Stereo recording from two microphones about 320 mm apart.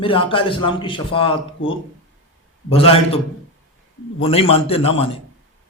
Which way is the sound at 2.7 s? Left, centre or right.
Centre.